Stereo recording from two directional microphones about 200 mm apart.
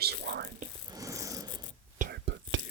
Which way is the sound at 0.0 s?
55° right (ahead or behind).